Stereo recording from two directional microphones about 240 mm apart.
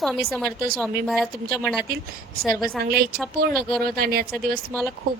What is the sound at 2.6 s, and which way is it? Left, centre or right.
A woman's voice, right.